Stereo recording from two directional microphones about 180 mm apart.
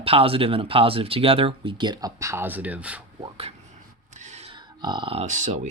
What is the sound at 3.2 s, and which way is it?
Speech, 35° right (ahead or behind).